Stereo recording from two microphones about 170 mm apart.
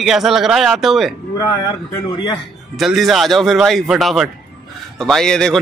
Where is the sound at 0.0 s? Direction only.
Centre (ahead or behind).